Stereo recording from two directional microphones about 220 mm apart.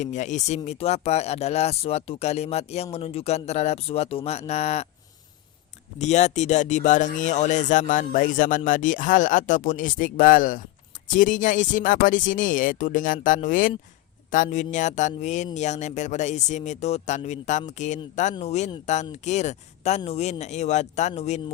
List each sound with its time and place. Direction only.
0.0 s speech: 35° left (ahead or behind)
6.0 s speech: 30° left (ahead or behind)